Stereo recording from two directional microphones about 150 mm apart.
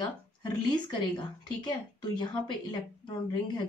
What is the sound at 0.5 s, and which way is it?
A woman's voice, 30° left (ahead or behind).